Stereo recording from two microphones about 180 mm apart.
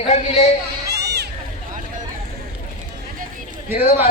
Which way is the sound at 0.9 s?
65° right (ahead or behind).